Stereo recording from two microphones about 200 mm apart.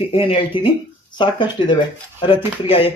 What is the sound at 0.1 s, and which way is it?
Speech, 30° left (ahead or behind).